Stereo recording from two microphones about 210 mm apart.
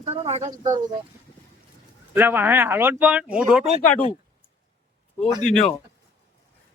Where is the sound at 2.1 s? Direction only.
10° right (ahead or behind).